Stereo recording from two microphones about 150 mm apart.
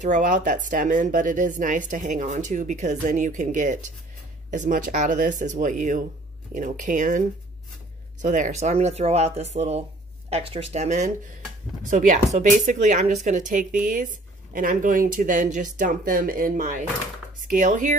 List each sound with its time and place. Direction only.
0.0 s speech: 60° right (ahead or behind)
12.4 s speech: 50° right (ahead or behind)